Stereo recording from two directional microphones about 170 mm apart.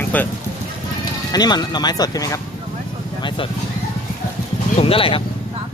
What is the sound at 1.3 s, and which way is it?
Speech, 25° left (ahead or behind).